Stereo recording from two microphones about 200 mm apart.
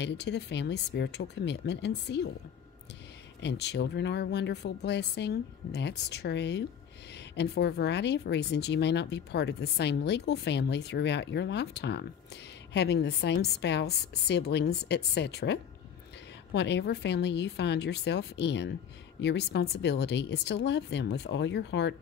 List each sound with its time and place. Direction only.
0.0 s speech: 60° left (ahead or behind)
3.4 s speech: 55° left (ahead or behind)